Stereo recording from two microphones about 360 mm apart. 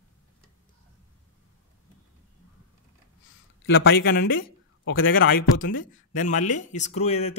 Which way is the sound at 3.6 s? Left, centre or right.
Left.